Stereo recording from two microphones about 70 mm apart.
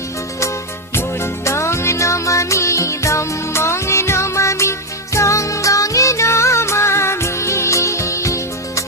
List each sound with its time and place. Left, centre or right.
0.9 s music: left